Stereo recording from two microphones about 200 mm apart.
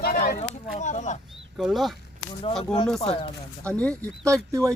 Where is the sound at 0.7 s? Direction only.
35° left (ahead or behind).